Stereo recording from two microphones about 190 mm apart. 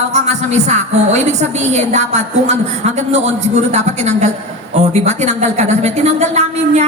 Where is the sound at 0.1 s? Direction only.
35° right (ahead or behind).